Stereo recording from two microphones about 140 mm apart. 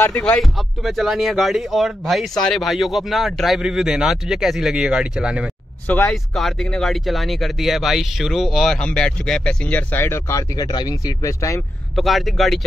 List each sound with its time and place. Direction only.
0.1 s speech: 5° left (ahead or behind)
5.9 s speech: 15° left (ahead or behind)
6.3 s speech: centre (ahead or behind); by 11.6 s 20° left (ahead or behind)
11.9 s speech: centre (ahead or behind)